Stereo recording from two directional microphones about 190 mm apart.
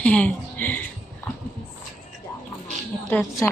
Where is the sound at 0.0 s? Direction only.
5° left (ahead or behind).